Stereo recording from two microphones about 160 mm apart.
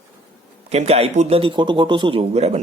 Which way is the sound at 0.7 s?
40° right (ahead or behind).